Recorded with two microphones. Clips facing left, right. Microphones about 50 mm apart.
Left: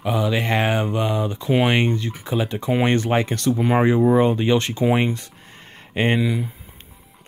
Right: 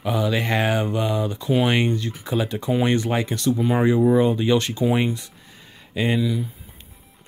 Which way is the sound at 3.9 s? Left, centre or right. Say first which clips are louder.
Left 1 dB; left.